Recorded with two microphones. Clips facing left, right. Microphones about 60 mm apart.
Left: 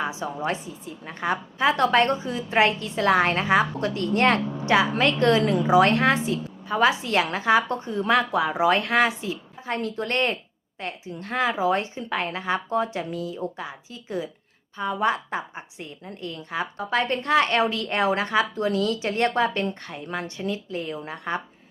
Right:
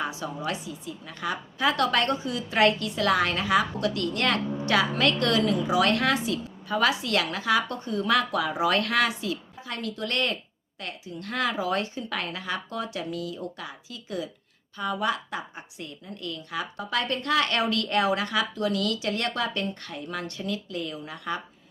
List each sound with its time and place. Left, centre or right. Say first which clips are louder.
0.0 s a woman's voice: left 3 dB; left